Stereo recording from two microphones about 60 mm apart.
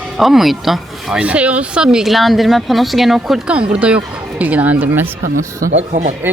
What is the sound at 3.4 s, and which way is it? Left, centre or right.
Speech, right.